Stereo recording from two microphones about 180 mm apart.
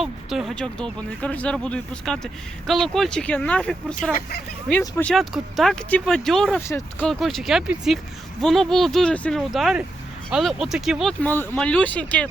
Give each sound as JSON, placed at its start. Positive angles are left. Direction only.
{"t": 0.0, "sound": "speech", "side_deg": 0}
{"t": 4.1, "sound": "speech", "side_deg": 65}
{"t": 4.8, "sound": "speech", "side_deg": 10}
{"t": 5.1, "sound": "speech", "side_deg": 0}
{"t": 6.6, "sound": "speech", "side_deg": 15}
{"t": 7.1, "sound": "speech", "side_deg": 0}